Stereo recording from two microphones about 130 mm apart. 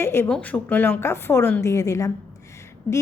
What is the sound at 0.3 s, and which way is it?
A woman's voice, 10° left (ahead or behind).